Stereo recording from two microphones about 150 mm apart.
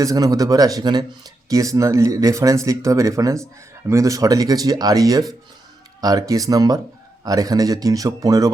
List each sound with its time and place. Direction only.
0.0 s speech: 25° right (ahead or behind)